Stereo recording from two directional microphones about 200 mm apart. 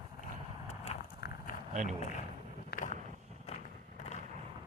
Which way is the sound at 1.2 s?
55° left (ahead or behind).